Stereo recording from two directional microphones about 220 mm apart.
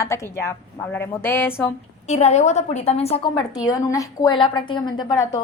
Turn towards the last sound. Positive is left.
turn(degrees=20)  # may be behind; listen again after turning